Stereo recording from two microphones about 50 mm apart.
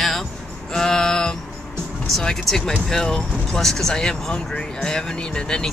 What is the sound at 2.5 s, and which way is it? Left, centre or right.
Speech, centre.